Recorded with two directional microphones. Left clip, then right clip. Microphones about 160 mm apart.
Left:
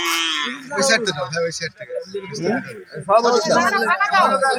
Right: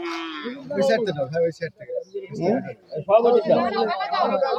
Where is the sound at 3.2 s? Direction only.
55° right (ahead or behind); by 4.4 s 70° right (ahead or behind).